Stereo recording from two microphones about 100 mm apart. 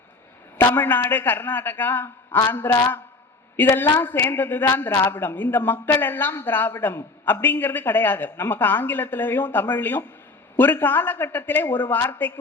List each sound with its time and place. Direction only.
0.7 s speech: 20° left (ahead or behind)
4.0 s speech: 20° left (ahead or behind)